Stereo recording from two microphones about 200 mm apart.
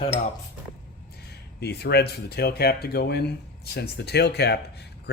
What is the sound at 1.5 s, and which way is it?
Speech, 55° left (ahead or behind).